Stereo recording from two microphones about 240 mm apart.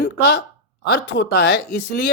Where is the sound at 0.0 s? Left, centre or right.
Left.